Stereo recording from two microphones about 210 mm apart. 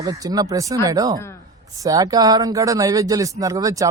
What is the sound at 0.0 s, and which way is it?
Speech, 15° right (ahead or behind).